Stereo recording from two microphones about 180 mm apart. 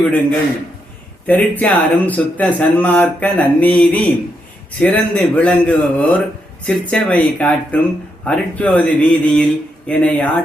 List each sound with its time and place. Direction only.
1.3 s speech: 10° left (ahead or behind)